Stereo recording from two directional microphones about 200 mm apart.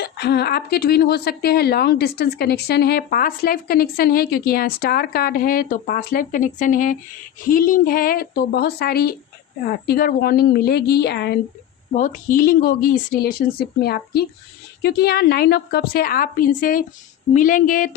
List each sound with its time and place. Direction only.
0.0 s a woman's voice: 55° left (ahead or behind)
11.9 s a woman's voice: 40° left (ahead or behind)